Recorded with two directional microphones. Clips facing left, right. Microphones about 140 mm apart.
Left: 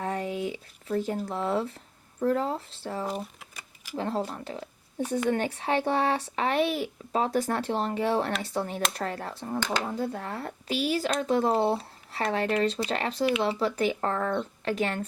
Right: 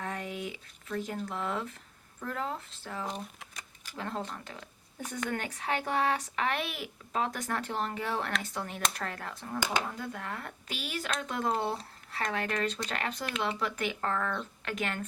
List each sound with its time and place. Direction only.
0.0 s speech: 35° left (ahead or behind)
9.6 s speech: 10° right (ahead or behind)
9.8 s speech: 35° left (ahead or behind)